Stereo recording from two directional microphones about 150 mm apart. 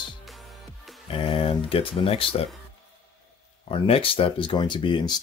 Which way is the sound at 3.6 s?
40° left (ahead or behind).